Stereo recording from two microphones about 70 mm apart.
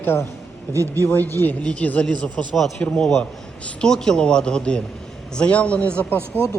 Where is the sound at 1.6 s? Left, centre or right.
Centre.